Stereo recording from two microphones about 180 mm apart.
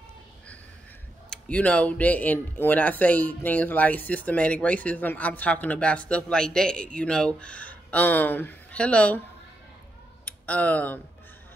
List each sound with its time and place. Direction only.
1.3 s speech: 5° left (ahead or behind)
10.2 s speech: 10° left (ahead or behind)